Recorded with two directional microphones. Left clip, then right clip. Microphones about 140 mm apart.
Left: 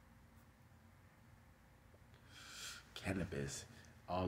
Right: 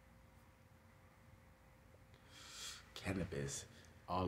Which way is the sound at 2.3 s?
10° right (ahead or behind).